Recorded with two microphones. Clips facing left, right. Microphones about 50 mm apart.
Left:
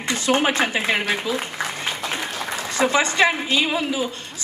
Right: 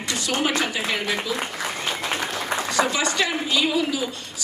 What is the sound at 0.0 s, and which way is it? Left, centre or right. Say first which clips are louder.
A woman's voice: left 4 dB; left.